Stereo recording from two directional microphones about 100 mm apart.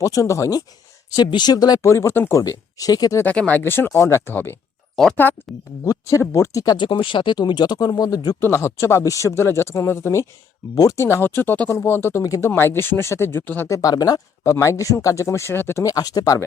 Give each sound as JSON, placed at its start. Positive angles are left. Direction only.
{"t": 0.0, "sound": "speech", "side_deg": 35}
{"t": 1.1, "sound": "speech", "side_deg": 45}
{"t": 1.9, "sound": "speech", "side_deg": 25}
{"t": 2.4, "sound": "speech", "side_deg": 35}
{"t": 3.3, "sound": "speech", "side_deg": 15}
{"t": 5.8, "sound": "speech", "side_deg": 35}
{"t": 6.7, "sound": "speech", "side_deg": 55}
{"t": 8.4, "sound": "speech", "side_deg": 25}
{"t": 13.7, "sound": "speech", "side_deg": 35}
{"t": 14.4, "sound": "speech", "side_deg": 30}
{"t": 15.8, "sound": "speech", "side_deg": 35}